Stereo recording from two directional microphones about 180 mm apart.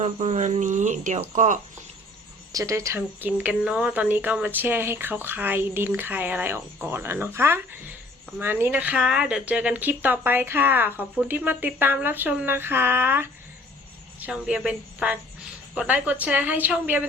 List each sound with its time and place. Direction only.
0.0 s speech: 40° right (ahead or behind)
2.5 s a woman's voice: 20° right (ahead or behind)